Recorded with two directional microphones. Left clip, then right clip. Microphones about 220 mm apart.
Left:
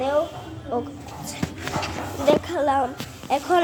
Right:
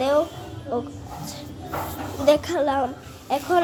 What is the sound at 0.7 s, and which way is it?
Speech, 10° right (ahead or behind).